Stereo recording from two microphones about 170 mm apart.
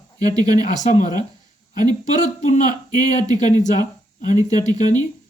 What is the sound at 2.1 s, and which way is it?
Speech, 45° left (ahead or behind).